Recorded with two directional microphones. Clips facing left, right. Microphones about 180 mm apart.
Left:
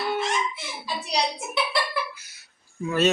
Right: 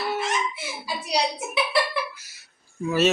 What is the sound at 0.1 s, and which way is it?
Fowl, 5° right (ahead or behind).